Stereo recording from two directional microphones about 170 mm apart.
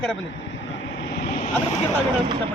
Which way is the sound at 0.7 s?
90° left.